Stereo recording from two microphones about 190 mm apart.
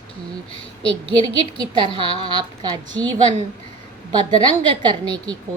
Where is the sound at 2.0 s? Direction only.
25° right (ahead or behind).